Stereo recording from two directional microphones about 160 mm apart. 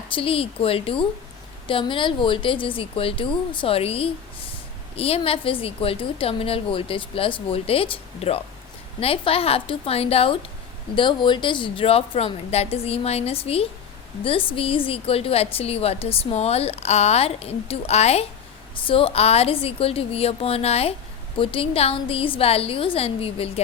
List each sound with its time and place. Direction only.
0.1 s a woman's voice: 35° left (ahead or behind)